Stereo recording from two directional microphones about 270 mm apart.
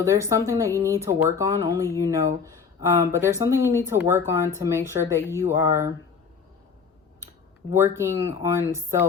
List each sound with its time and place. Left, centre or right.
0.0 s speech: centre
7.7 s speech: centre